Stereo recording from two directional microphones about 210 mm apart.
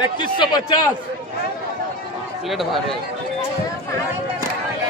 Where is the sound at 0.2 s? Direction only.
20° left (ahead or behind).